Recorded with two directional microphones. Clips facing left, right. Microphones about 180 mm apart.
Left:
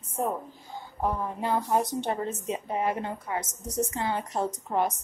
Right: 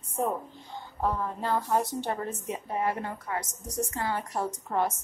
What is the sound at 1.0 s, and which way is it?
A woman's voice, 15° left (ahead or behind).